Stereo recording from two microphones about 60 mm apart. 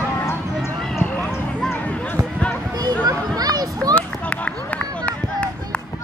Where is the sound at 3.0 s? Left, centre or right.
Right.